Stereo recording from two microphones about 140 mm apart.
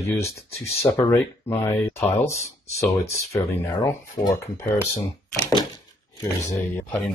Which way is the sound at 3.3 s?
20° left (ahead or behind).